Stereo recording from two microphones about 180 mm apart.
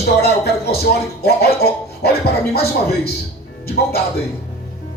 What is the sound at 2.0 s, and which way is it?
Speech, 60° left (ahead or behind).